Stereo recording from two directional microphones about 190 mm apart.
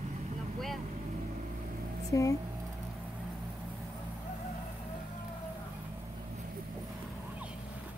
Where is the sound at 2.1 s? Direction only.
15° left (ahead or behind).